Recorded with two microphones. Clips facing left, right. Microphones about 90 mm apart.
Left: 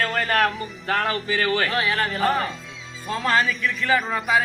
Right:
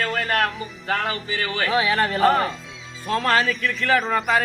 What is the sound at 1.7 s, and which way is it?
A man's voice, centre (ahead or behind).